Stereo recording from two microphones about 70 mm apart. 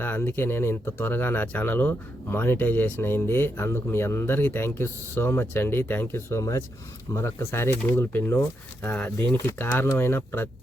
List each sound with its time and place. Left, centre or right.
0.0 s speech: left